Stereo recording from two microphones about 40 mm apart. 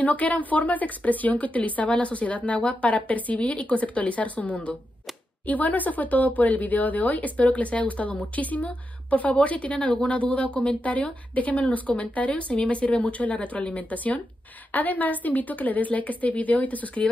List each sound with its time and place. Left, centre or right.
0.0 s a woman's voice: left